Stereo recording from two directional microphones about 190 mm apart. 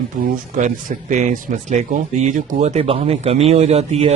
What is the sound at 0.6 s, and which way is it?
Speech, 45° right (ahead or behind).